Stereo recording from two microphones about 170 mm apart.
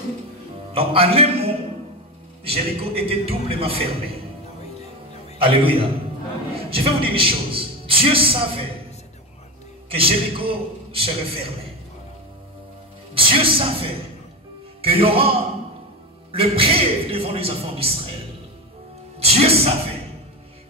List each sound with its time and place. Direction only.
0.7 s a man's voice: 35° right (ahead or behind)
5.4 s a man's voice: 30° right (ahead or behind)
9.8 s a man's voice: 35° right (ahead or behind)
13.1 s a man's voice: 30° right (ahead or behind)
19.1 s speech: 35° right (ahead or behind)